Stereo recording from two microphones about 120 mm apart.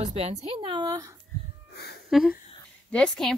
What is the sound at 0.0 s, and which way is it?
Speech, 70° right (ahead or behind).